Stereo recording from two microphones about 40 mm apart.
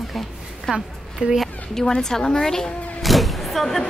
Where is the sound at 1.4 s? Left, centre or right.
Centre.